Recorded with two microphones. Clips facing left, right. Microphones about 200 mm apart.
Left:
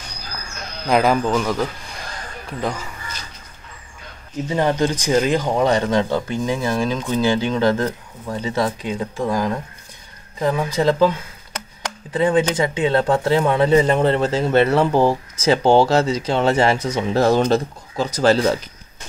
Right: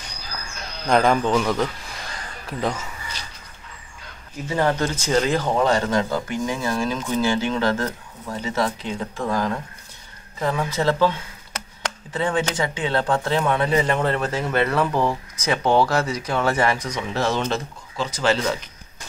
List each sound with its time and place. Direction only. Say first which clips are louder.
0.8 s a man's voice: left 1 dB; 5° left (ahead or behind)
4.5 s speech: left 3 dB; 15° left (ahead or behind)
17.2 s speech: left 7 dB; 40° left (ahead or behind)